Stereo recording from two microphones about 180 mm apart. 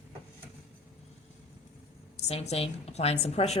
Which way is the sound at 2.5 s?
35° left (ahead or behind).